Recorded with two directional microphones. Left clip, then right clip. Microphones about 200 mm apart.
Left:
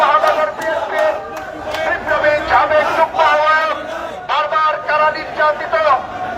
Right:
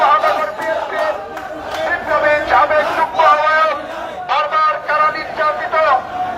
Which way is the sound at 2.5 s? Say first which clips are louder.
Even; 5° left (ahead or behind).